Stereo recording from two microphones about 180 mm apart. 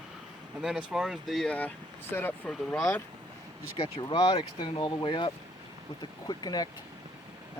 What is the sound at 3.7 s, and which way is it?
Speech, 30° left (ahead or behind).